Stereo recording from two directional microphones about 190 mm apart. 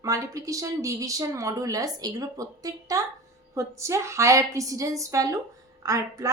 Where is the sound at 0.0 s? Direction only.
15° right (ahead or behind).